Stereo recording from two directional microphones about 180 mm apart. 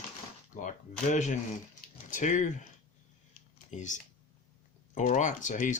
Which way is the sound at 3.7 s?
45° left (ahead or behind).